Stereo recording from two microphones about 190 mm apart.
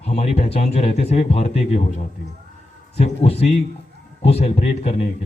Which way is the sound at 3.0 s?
35° left (ahead or behind).